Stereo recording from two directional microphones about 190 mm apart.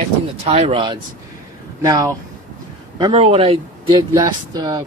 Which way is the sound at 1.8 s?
20° right (ahead or behind).